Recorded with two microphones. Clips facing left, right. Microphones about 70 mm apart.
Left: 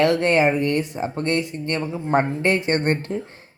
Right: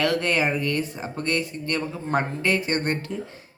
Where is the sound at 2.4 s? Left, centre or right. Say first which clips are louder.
Left 4 dB; left.